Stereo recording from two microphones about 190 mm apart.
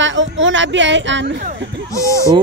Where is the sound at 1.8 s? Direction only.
15° left (ahead or behind).